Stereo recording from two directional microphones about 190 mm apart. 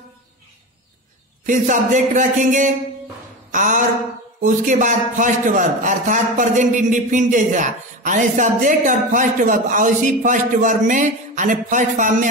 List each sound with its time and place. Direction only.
1.4 s a man's voice: 40° right (ahead or behind)